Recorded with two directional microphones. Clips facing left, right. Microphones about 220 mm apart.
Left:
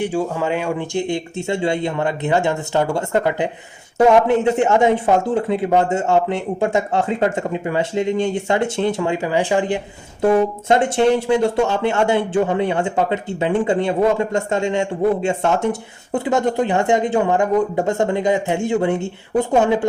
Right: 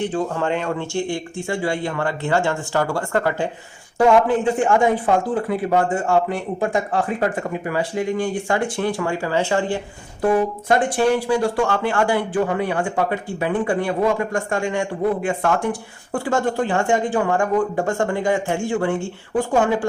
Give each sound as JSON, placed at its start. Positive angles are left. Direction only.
{"t": 0.0, "sound": "speech", "side_deg": 10}